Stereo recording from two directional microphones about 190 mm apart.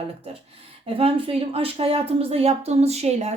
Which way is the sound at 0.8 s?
30° right (ahead or behind).